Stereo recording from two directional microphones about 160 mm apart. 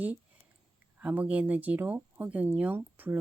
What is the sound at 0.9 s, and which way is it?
Speech, 10° right (ahead or behind).